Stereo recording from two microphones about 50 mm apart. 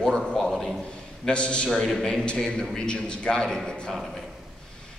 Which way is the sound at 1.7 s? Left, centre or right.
Centre.